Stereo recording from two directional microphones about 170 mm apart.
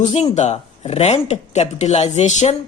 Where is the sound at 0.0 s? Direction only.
35° left (ahead or behind).